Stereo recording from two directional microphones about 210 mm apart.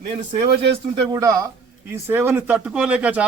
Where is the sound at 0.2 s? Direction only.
35° right (ahead or behind).